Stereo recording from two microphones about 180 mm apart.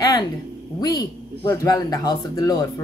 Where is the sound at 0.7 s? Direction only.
20° left (ahead or behind).